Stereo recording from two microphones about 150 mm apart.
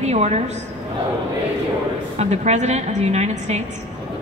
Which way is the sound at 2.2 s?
45° right (ahead or behind).